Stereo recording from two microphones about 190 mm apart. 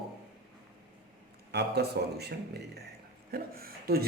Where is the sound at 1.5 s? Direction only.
60° right (ahead or behind).